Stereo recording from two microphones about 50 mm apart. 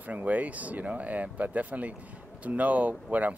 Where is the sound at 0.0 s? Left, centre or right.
Right.